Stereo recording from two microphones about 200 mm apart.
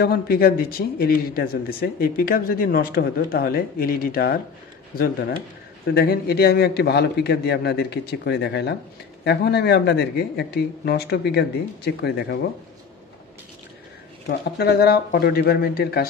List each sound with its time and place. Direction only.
0.0 s a man's voice: 50° left (ahead or behind)
14.6 s a man's voice: 50° left (ahead or behind)